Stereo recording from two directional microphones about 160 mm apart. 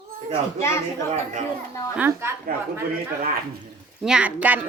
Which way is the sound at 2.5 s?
65° right (ahead or behind).